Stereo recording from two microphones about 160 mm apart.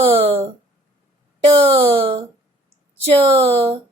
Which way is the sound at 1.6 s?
40° right (ahead or behind).